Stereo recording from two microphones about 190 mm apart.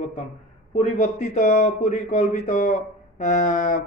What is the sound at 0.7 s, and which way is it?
A man's voice, 40° left (ahead or behind).